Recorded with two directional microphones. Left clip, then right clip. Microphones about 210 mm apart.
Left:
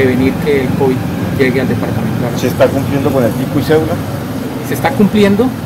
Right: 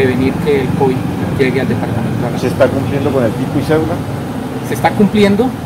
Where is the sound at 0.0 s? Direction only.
5° right (ahead or behind).